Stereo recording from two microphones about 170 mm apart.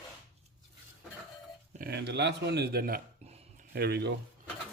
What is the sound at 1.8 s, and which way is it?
Speech, 70° right (ahead or behind).